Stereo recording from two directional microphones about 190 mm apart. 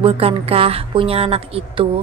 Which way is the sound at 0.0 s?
30° right (ahead or behind).